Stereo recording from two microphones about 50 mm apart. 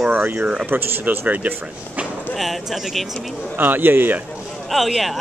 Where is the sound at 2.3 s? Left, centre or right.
Centre.